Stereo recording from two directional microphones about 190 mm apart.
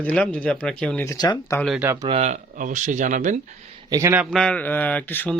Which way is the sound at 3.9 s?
15° right (ahead or behind).